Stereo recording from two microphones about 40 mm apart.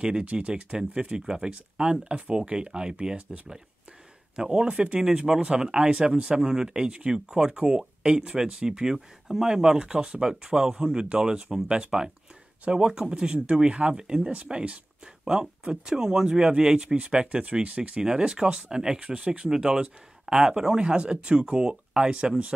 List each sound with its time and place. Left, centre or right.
0.2 s speech: right
3.2 s speech: right
4.4 s speech: right
5.0 s speech: centre
6.4 s speech: centre
15.6 s speech: centre
18.0 s speech: centre
19.0 s speech: right
19.5 s speech: centre